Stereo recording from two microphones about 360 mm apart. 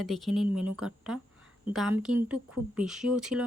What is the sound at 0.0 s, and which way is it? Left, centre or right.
A woman's voice, centre.